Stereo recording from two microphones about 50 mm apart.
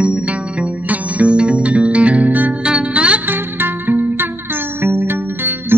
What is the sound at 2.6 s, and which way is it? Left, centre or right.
Music, right.